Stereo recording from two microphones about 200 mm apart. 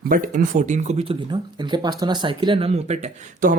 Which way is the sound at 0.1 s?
40° right (ahead or behind).